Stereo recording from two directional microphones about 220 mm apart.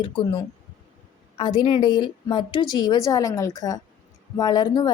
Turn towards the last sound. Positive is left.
turn(degrees=20)  # may be behind; listen again after turning